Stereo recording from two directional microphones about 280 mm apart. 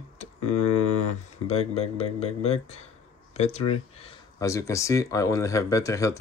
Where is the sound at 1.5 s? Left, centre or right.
Left.